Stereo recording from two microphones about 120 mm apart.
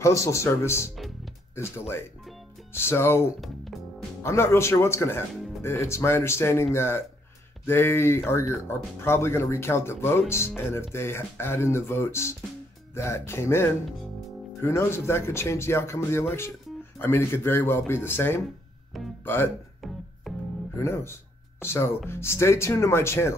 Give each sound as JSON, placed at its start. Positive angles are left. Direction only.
{"t": 0.0, "sound": "speech", "side_deg": 25}
{"t": 0.9, "sound": "music", "side_deg": 0}
{"t": 1.5, "sound": "speech", "side_deg": 20}
{"t": 3.3, "sound": "music", "side_deg": 0}
{"t": 4.2, "sound": "speech", "side_deg": 20}
{"t": 20.3, "sound": "music", "side_deg": 0}
{"t": 20.7, "sound": "speech", "side_deg": 20}